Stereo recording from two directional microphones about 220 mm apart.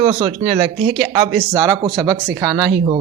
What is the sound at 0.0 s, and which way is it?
A man's voice, 25° right (ahead or behind).